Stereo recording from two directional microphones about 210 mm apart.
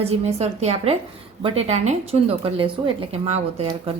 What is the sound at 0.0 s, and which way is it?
A woman's voice, 30° right (ahead or behind).